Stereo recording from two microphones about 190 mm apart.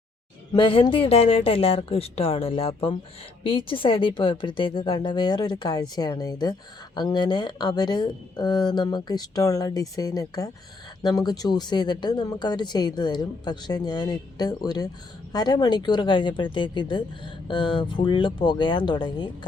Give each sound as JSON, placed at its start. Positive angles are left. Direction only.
{"t": 0.5, "sound": "a woman's voice", "side_deg": 25}